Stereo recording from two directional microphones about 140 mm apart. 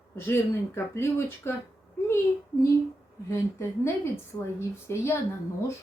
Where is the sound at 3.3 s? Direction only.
20° left (ahead or behind).